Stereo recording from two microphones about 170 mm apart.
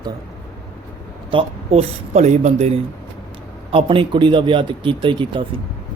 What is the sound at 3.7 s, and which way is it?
Speech, 30° right (ahead or behind).